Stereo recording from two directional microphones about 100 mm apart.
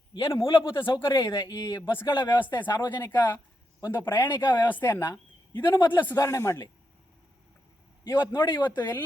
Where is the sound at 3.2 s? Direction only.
35° left (ahead or behind).